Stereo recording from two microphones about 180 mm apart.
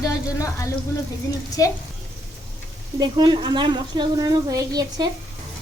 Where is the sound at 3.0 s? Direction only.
25° right (ahead or behind).